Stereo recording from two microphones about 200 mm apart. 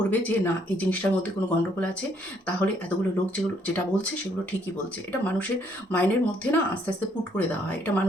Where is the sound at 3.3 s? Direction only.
5° left (ahead or behind).